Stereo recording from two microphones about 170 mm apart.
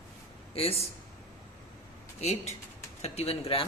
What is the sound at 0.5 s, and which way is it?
Speech, 35° left (ahead or behind).